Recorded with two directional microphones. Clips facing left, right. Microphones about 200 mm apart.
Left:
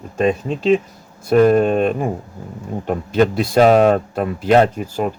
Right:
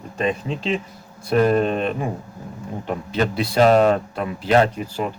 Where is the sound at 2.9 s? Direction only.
45° left (ahead or behind).